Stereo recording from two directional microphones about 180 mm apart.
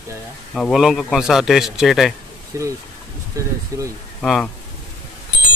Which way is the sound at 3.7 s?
15° right (ahead or behind).